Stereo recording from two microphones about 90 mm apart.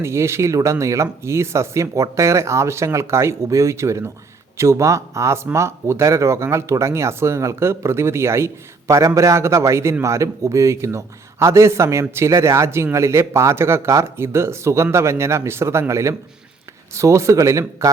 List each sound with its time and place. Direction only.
0.0 s speech: 30° right (ahead or behind)